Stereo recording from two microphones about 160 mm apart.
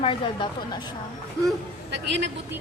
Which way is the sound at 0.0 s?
30° left (ahead or behind).